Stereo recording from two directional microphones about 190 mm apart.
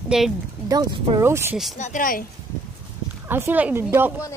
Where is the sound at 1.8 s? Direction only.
40° left (ahead or behind).